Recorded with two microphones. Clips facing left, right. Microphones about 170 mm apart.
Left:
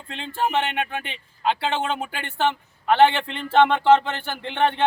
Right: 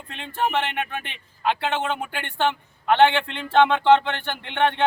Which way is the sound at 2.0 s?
5° left (ahead or behind).